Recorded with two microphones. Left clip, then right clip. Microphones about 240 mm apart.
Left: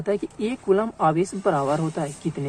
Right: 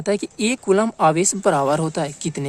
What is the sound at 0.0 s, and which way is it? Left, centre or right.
Speech, right.